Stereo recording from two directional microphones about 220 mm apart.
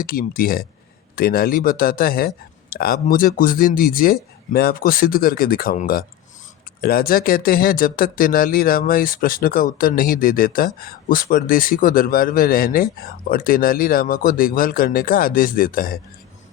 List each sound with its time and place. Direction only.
0.0 s speech: 40° left (ahead or behind)